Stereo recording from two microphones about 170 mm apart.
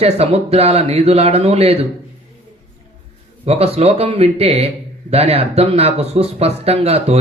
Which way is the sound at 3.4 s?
35° right (ahead or behind).